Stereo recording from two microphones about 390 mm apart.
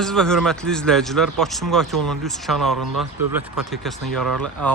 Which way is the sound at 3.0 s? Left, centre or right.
Right.